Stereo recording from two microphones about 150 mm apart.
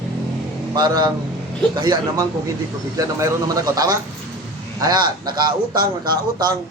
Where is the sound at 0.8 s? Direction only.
30° right (ahead or behind).